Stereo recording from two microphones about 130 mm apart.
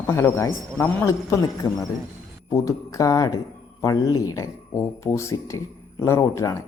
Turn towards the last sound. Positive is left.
turn(degrees=25)  # may be behind; listen again after turning